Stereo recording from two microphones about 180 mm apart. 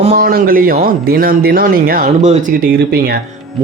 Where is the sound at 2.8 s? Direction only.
60° right (ahead or behind).